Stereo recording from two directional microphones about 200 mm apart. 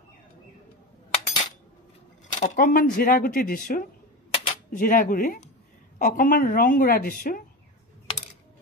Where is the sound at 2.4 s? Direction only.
40° left (ahead or behind).